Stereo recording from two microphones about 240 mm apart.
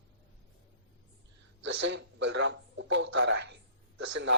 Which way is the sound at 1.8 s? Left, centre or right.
Right.